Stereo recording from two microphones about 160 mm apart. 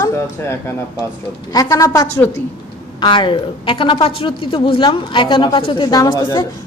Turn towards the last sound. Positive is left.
turn(degrees=25)  # may be behind; listen again after turning